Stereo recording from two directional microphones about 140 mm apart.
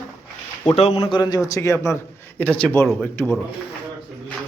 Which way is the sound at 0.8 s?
45° left (ahead or behind).